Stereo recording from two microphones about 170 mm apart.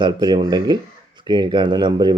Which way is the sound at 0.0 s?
25° right (ahead or behind).